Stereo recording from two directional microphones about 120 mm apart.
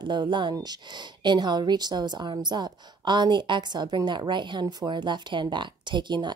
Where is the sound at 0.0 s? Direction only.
40° right (ahead or behind).